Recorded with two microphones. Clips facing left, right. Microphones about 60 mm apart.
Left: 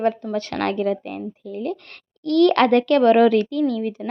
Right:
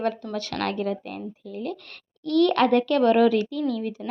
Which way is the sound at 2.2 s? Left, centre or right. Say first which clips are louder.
Left 4 dB; left.